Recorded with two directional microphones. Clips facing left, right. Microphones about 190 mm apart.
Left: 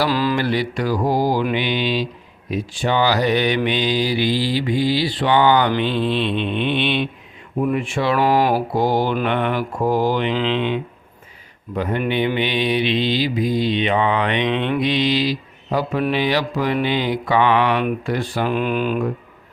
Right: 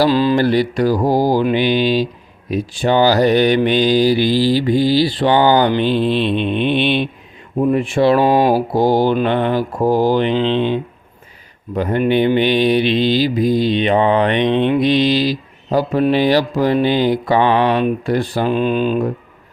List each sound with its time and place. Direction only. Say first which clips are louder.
0.0 s speech: right 6 dB; 25° right (ahead or behind)
0.3 s mantra: right 6 dB; 40° right (ahead or behind)
6.1 s a sound: right 4 dB; 5° right (ahead or behind)
6.7 s mantra: right 4 dB; 40° right (ahead or behind)
8.2 s speech: right 4 dB; 20° right (ahead or behind)
8.7 s mantra: right 5 dB; 35° right (ahead or behind)